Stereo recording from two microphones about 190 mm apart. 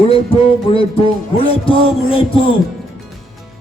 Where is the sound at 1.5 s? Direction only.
30° left (ahead or behind).